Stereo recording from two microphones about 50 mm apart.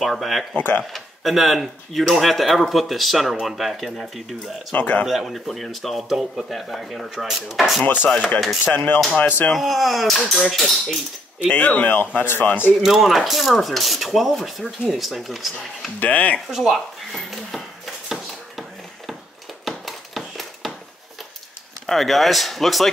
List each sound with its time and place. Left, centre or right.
0.0 s speech: centre
0.6 s a man's voice: left
0.9 s speech: centre
4.7 s a man's voice: left
5.0 s a man's voice: centre
5.3 s speech: centre
8.7 s a man's voice: left
9.6 s speech: centre
11.4 s a man's voice: left
12.8 s speech: centre
16.0 s speech: left
16.4 s a sound: centre
21.8 s speech: centre